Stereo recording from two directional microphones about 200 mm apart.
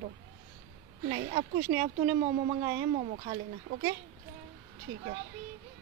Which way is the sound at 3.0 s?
35° right (ahead or behind).